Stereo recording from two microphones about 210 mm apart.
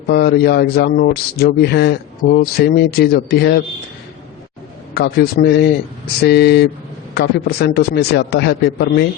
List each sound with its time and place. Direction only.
0.1 s speech: 50° left (ahead or behind)
4.9 s speech: 50° left (ahead or behind)